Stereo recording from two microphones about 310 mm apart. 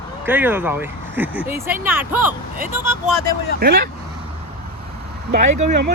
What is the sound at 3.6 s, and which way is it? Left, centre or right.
Speech, right.